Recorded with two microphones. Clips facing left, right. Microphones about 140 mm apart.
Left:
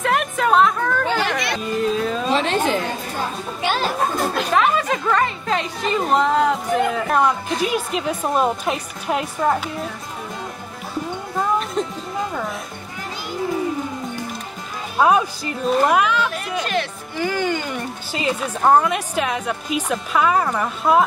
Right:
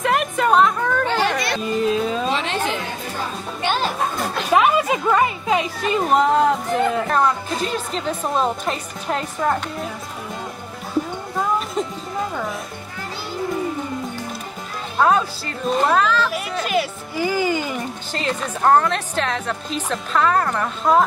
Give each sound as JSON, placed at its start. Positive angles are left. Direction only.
{"t": 0.0, "sound": "a sound", "side_deg": 0}
{"t": 1.9, "sound": "music", "side_deg": 0}
{"t": 2.3, "sound": "chatter", "side_deg": 40}
{"t": 3.6, "sound": "children playing", "side_deg": 0}
{"t": 4.6, "sound": "a woman's voice", "side_deg": -10}
{"t": 11.3, "sound": "music", "side_deg": 0}
{"t": 15.0, "sound": "speech", "side_deg": 15}
{"t": 16.3, "sound": "speech", "side_deg": -5}